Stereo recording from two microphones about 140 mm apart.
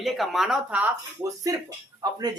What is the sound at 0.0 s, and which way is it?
Speech, centre (ahead or behind).